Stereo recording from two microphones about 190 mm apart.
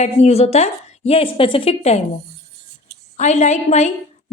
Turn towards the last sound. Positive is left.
turn(degrees=35)  # may be behind; listen again after turning